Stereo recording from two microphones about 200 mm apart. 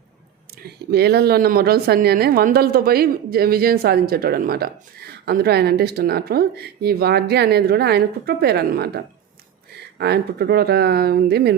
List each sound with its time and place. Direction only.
0.6 s speech: 50° right (ahead or behind)
10.0 s speech: 55° right (ahead or behind)